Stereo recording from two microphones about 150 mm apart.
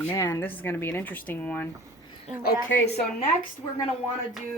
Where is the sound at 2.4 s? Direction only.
90° left.